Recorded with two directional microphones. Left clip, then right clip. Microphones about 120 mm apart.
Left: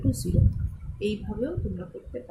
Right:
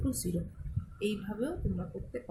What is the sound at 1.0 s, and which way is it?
Speech, 20° right (ahead or behind).